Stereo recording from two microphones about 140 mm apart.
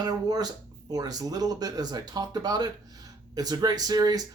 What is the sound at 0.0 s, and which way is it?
Speech, 30° right (ahead or behind).